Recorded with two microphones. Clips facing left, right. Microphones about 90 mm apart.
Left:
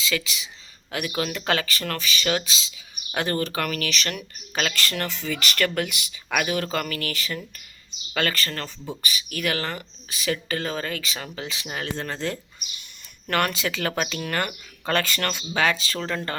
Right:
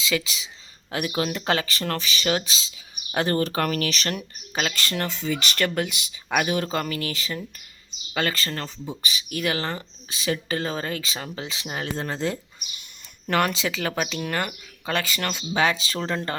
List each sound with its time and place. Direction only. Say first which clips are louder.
0.1 s speech: right 3 dB; 30° right (ahead or behind)
4.5 s speech: even; 20° right (ahead or behind)
12.1 s speech: right 2 dB; 10° right (ahead or behind)